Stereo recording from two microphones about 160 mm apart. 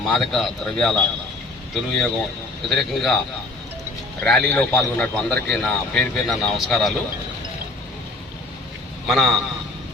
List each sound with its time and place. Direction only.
0.0 s a man's voice: centre (ahead or behind)
4.2 s a man's voice: 5° left (ahead or behind)
9.0 s a man's voice: centre (ahead or behind)